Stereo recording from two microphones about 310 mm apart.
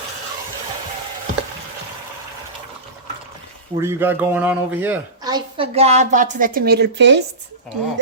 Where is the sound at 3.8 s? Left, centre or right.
Centre.